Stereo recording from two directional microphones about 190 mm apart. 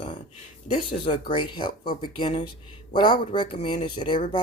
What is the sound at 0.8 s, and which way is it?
Speech, 25° left (ahead or behind).